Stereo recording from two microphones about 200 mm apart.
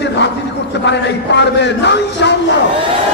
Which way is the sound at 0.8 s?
60° left (ahead or behind).